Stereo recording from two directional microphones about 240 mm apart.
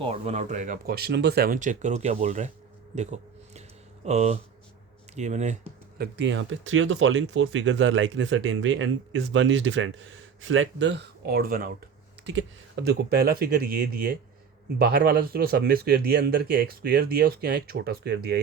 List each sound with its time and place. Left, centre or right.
0.0 s speech: right
2.9 s a sound: right
4.0 s speech: right
6.0 s speech: right
12.2 s speech: right